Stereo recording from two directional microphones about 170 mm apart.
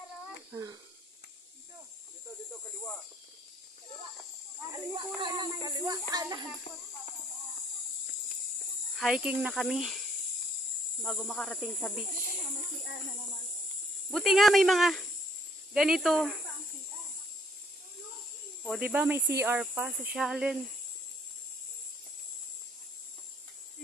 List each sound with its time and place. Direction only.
0.5 s speech: 20° right (ahead or behind)
4.9 s speech: 25° right (ahead or behind)
8.9 s speech: 5° right (ahead or behind)
14.1 s speech: centre (ahead or behind)
18.8 s speech: 10° right (ahead or behind)